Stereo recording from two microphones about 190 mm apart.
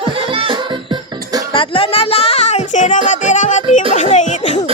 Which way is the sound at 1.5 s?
30° left (ahead or behind).